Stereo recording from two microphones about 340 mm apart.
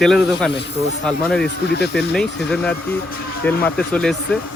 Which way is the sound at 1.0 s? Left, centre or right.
Centre.